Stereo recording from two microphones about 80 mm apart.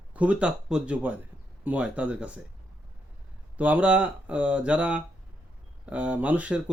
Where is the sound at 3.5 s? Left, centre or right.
Centre.